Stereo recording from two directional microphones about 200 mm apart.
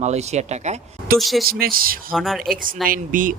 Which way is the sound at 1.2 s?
Centre (ahead or behind).